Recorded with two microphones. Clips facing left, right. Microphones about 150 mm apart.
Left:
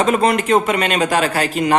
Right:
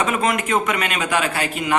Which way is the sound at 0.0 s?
35° left (ahead or behind).